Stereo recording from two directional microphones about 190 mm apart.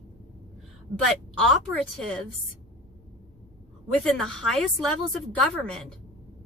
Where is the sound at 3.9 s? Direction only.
5° left (ahead or behind).